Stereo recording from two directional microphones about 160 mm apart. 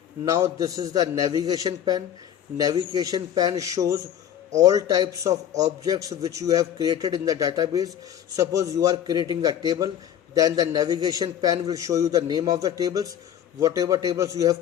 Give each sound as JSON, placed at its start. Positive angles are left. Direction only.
{"t": 0.3, "sound": "a man's voice", "side_deg": -20}